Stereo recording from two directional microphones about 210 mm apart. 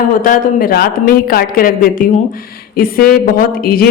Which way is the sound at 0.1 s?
40° left (ahead or behind).